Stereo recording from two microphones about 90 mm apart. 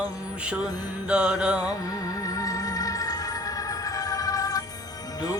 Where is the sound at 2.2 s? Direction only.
40° left (ahead or behind).